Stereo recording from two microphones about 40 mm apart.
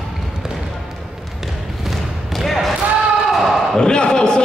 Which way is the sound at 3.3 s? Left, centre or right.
Centre.